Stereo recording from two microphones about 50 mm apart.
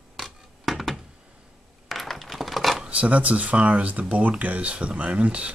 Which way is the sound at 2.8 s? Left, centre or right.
Right.